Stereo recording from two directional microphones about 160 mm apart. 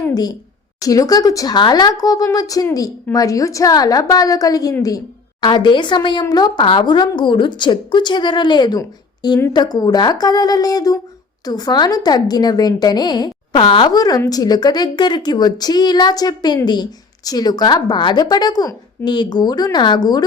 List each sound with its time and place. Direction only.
0.0 s a woman's voice: 25° left (ahead or behind)